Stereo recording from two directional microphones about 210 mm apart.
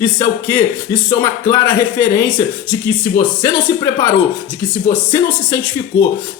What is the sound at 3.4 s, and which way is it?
Speech, 15° left (ahead or behind).